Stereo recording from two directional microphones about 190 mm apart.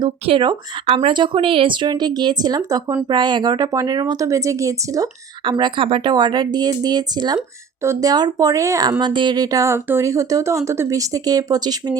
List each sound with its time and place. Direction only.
0.0 s speech: 25° right (ahead or behind)